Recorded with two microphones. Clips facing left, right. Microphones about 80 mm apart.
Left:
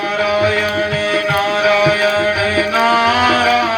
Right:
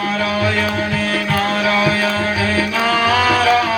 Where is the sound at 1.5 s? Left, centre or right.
Centre.